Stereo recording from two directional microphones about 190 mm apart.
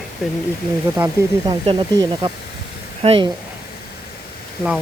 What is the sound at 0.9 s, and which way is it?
Speech, 15° right (ahead or behind).